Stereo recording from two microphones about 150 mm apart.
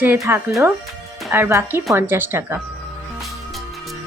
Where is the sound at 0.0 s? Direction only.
15° right (ahead or behind).